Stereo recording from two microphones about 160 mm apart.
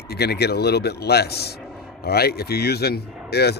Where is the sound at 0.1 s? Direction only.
90° left.